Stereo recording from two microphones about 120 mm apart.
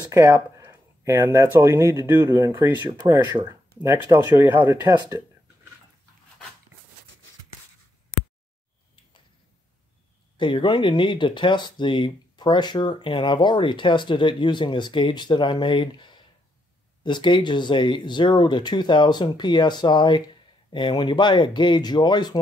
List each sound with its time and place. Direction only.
0.1 s speech: 25° right (ahead or behind)
10.3 s speech: 45° left (ahead or behind)